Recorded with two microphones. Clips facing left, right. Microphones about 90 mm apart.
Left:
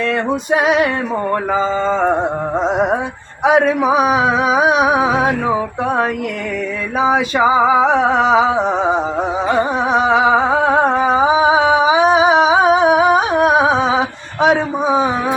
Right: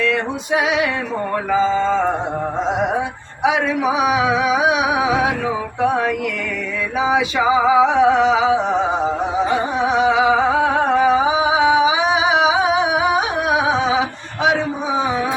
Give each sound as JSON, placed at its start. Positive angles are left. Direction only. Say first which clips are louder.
{"t": 0.5, "sound": "male singing", "louder": "left 4 dB", "side_deg": 45}
{"t": 1.5, "sound": "music", "louder": "right 3 dB", "side_deg": 40}
{"t": 3.4, "sound": "music", "louder": "left 5 dB", "side_deg": 40}
{"t": 7.0, "sound": "male singing", "louder": "left 3 dB", "side_deg": 45}
{"t": 9.7, "sound": "music", "louder": "left 2 dB", "side_deg": 40}